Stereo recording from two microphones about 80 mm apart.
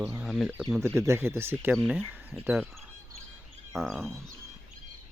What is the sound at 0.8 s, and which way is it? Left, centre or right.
Speech, right.